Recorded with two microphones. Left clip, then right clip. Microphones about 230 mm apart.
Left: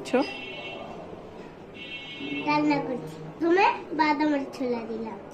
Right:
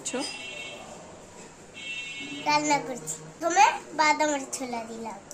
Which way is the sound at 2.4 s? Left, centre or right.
Right.